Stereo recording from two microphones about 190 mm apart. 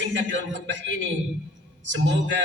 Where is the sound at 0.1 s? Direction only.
75° right (ahead or behind).